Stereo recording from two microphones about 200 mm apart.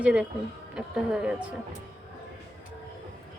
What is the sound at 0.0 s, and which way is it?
Speech, 5° right (ahead or behind).